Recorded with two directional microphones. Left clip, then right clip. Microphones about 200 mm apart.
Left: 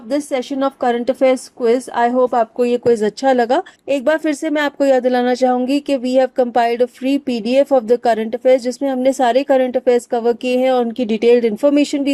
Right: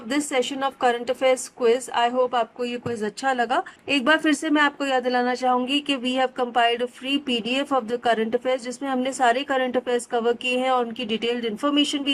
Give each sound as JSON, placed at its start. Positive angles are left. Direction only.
{"t": 0.1, "sound": "a woman's voice", "side_deg": 25}